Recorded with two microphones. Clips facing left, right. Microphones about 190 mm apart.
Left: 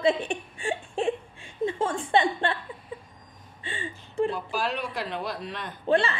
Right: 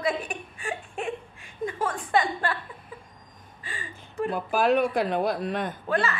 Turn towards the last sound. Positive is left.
turn(degrees=30)  # may be behind; listen again after turning